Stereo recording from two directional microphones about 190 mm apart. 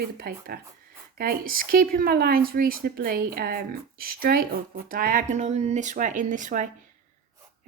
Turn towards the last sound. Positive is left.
turn(degrees=-40)  # may be behind; listen again after turning